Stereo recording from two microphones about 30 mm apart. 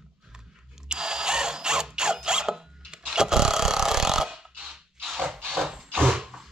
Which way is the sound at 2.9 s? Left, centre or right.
Right.